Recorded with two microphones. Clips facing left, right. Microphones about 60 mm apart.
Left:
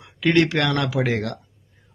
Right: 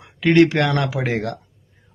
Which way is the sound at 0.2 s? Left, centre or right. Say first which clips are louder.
Right 4 dB; right.